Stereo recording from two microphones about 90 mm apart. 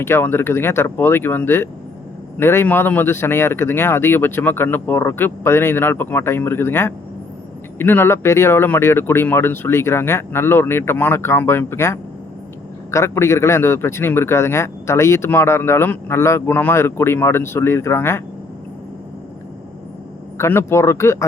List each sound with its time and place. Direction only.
0.0 s a man's voice: 25° left (ahead or behind)
20.4 s speech: 30° left (ahead or behind)